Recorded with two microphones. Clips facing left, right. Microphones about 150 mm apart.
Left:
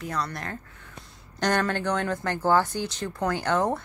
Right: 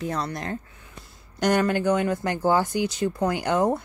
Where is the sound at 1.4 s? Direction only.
10° right (ahead or behind).